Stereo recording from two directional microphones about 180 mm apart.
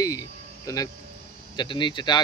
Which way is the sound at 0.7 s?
20° left (ahead or behind).